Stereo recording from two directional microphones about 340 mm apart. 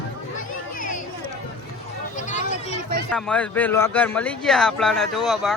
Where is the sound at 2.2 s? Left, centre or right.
Left.